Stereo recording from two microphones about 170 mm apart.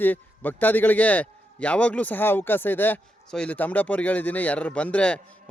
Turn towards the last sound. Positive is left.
turn(degrees=5)  # may be behind; listen again after turning